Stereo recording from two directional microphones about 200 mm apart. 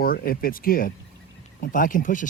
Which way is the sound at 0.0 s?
45° left (ahead or behind).